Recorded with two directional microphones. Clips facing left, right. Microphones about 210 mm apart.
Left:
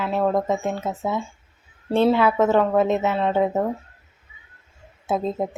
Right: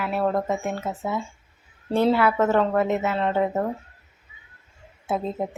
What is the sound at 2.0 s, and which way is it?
A woman's voice, 15° left (ahead or behind).